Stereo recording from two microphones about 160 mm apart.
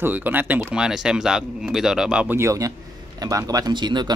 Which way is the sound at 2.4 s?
20° right (ahead or behind).